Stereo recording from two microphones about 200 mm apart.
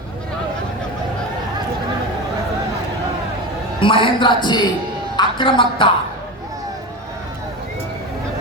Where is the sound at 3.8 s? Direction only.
25° left (ahead or behind).